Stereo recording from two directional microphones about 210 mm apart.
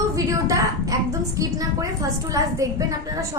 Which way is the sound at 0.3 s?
15° right (ahead or behind).